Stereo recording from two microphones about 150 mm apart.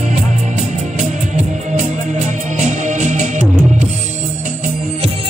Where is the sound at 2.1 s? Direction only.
50° right (ahead or behind).